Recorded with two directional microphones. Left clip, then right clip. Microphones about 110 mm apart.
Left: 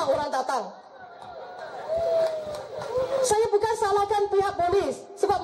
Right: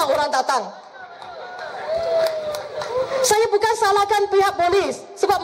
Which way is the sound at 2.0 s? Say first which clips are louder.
Right 4 dB; 15° right (ahead or behind).